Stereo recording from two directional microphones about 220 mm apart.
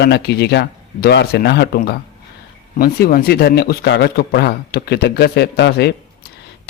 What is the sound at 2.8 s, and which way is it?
Speech, 45° left (ahead or behind).